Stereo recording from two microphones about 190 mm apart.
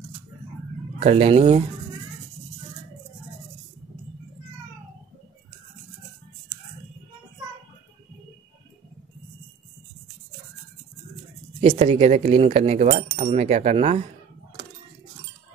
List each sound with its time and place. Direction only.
0.9 s speech: 30° right (ahead or behind)
11.6 s speech: 30° right (ahead or behind)